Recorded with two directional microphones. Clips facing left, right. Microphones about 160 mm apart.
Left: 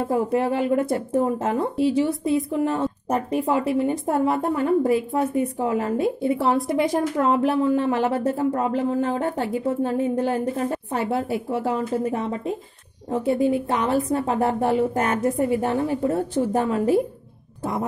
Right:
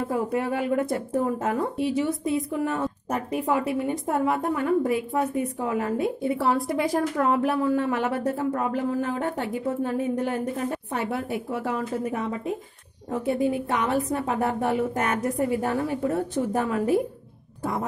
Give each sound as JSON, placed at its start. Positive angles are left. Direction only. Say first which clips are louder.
{"t": 0.0, "sound": "speech", "louder": "left 4 dB", "side_deg": 30}